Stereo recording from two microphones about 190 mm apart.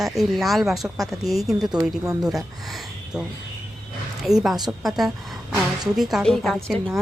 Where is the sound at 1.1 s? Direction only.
Centre (ahead or behind).